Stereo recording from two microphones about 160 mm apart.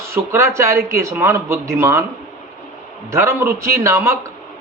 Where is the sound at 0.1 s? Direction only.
15° right (ahead or behind).